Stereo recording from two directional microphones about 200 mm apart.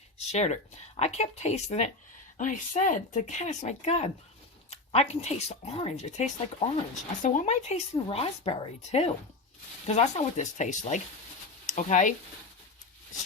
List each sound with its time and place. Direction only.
0.2 s speech: 35° left (ahead or behind)